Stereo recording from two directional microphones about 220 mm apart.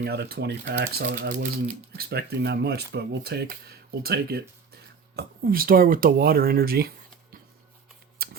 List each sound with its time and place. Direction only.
0.0 s speech: 45° right (ahead or behind)
8.2 s scissors: 45° right (ahead or behind)